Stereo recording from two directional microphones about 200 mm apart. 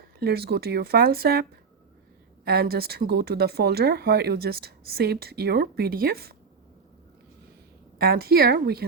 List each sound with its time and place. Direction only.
0.2 s speech: 50° right (ahead or behind)
7.9 s speech: 50° right (ahead or behind)